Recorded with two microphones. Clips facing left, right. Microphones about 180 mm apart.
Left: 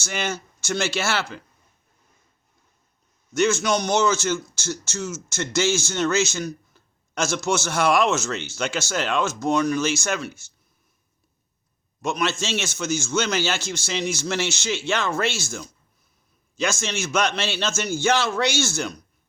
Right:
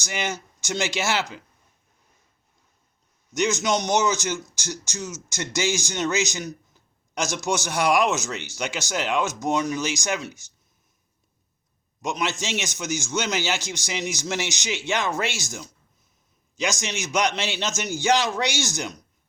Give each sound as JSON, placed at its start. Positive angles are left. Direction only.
{"t": 0.0, "sound": "speech", "side_deg": -15}
{"t": 3.3, "sound": "speech", "side_deg": -15}
{"t": 12.0, "sound": "speech", "side_deg": -15}